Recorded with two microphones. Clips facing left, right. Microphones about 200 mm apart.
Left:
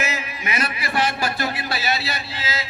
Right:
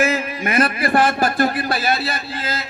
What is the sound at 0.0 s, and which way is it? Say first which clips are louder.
A man's voice: right 8 dB; 50° right (ahead or behind).